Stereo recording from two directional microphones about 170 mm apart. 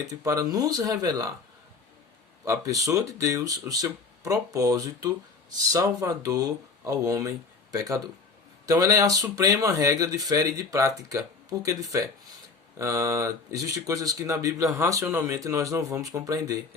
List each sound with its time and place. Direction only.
0.1 s speech: 20° right (ahead or behind)
2.4 s speech: 20° right (ahead or behind)